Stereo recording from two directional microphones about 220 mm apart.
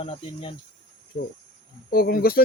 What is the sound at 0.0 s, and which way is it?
Speech, 25° left (ahead or behind).